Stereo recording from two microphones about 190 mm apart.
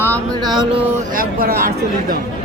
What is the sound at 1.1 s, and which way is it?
Speech, 50° right (ahead or behind).